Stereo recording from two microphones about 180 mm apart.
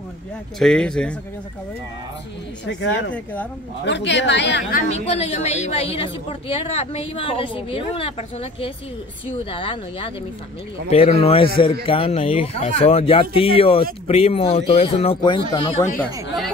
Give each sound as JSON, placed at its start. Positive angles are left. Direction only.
{"t": 0.6, "sound": "speech", "side_deg": 5}
{"t": 2.6, "sound": "a woman's voice", "side_deg": 80}
{"t": 4.7, "sound": "a woman's voice", "side_deg": 35}